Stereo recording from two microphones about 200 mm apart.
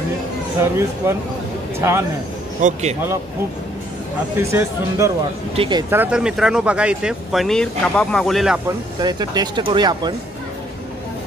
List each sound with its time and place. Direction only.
0.6 s speech: 15° right (ahead or behind)
2.6 s speech: 35° right (ahead or behind)
4.4 s speech: 15° right (ahead or behind)
5.9 s speech: 10° right (ahead or behind)
8.6 s speech: 20° right (ahead or behind)